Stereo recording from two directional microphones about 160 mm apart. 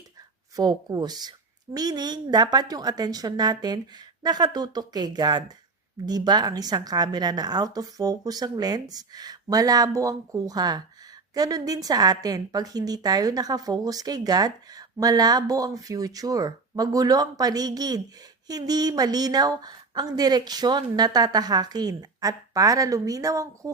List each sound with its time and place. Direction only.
0.5 s a woman's voice: 25° right (ahead or behind)